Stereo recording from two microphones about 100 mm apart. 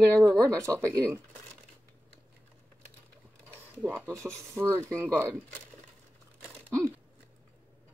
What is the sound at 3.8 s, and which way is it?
Speech, 20° right (ahead or behind).